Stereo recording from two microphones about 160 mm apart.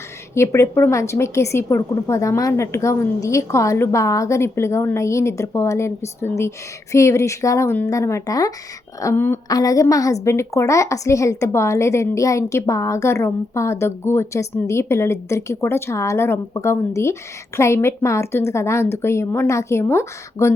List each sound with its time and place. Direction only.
0.3 s a woman's voice: 15° left (ahead or behind)